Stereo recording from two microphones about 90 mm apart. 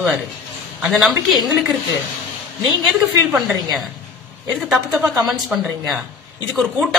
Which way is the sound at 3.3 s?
Centre (ahead or behind).